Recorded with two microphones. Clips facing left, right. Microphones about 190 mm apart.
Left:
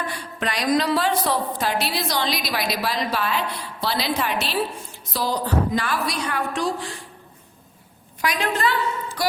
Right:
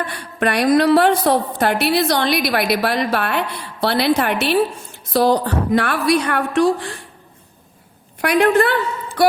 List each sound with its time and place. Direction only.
0.0 s a woman's voice: 60° right (ahead or behind)
8.2 s a woman's voice: 60° right (ahead or behind)